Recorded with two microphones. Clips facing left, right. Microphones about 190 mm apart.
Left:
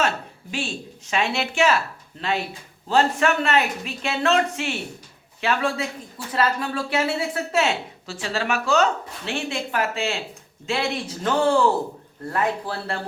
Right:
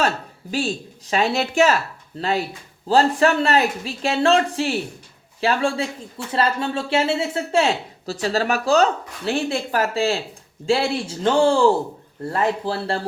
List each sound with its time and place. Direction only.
0.5 s a man's voice: 35° right (ahead or behind)